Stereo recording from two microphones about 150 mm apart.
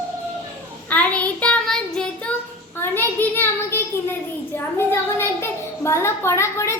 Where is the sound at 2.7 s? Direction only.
15° left (ahead or behind).